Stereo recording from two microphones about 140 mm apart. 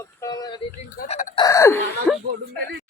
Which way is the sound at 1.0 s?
90° left.